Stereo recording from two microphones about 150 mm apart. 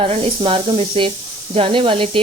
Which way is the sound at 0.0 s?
35° right (ahead or behind).